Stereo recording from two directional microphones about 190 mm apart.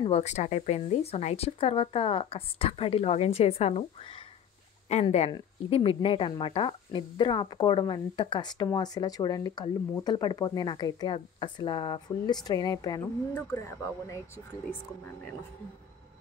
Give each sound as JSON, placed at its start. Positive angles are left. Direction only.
{"t": 0.0, "sound": "speech", "side_deg": 35}